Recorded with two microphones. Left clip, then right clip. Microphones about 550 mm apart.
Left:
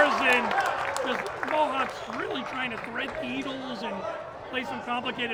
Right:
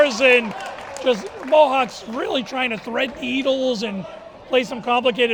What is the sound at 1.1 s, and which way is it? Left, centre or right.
Speech, right.